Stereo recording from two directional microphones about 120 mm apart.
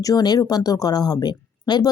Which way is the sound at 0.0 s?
35° left (ahead or behind).